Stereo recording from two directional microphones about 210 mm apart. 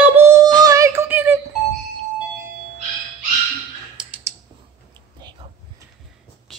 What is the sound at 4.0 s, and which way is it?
Typing, 5° right (ahead or behind).